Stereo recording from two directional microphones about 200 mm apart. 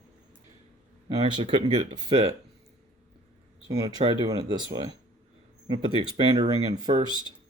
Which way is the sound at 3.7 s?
15° right (ahead or behind).